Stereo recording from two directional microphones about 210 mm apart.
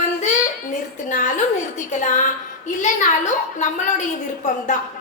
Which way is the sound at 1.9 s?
35° left (ahead or behind).